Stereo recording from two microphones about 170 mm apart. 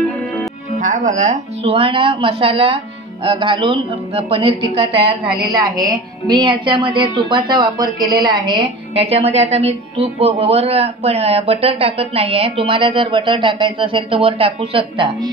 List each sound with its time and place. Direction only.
0.7 s speech: 45° right (ahead or behind)
5.4 s a woman's voice: 20° right (ahead or behind)